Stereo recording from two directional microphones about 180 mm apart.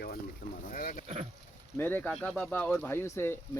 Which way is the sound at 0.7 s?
50° left (ahead or behind).